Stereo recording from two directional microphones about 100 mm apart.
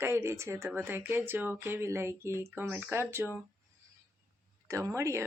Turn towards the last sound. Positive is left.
turn(degrees=-30)  # may be behind; listen again after turning